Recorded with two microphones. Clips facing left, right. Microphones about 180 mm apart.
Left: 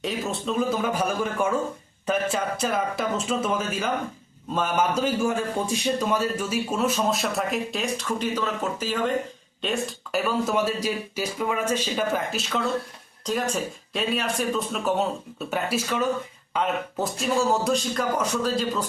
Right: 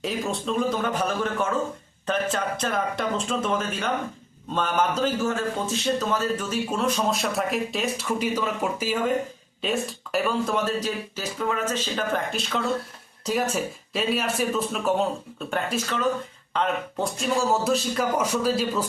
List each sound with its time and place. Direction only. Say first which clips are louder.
0.0 s a man's voice: right 1 dB; centre (ahead or behind)